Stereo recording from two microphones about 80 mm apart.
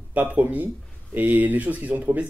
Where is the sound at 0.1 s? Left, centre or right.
Right.